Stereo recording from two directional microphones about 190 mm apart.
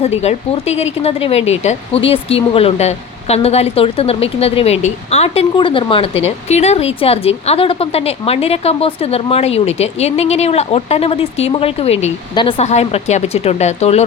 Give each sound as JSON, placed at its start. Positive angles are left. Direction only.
{"t": 0.2, "sound": "speech", "side_deg": 35}